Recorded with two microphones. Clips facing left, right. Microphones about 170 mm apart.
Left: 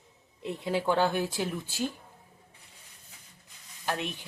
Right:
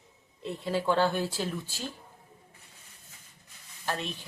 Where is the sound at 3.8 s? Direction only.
15° left (ahead or behind).